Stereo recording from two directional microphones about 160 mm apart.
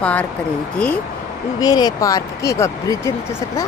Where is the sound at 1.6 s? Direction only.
25° left (ahead or behind).